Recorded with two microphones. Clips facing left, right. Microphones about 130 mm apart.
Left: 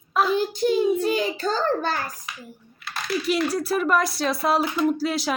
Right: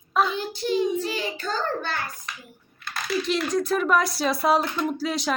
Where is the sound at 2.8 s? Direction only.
Centre (ahead or behind).